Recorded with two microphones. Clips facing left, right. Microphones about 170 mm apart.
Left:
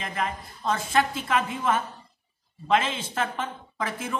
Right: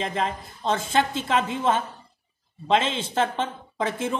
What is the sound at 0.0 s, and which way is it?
Speech, 25° right (ahead or behind).